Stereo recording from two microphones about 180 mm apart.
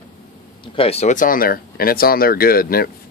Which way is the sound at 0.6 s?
30° left (ahead or behind).